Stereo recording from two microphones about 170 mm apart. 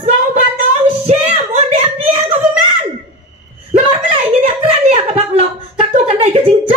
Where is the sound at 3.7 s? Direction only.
35° right (ahead or behind).